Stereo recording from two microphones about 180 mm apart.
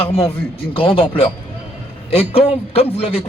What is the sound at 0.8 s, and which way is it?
A man's voice, 30° left (ahead or behind).